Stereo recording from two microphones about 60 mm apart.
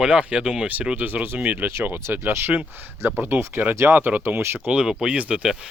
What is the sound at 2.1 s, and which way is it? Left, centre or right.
Speech, right.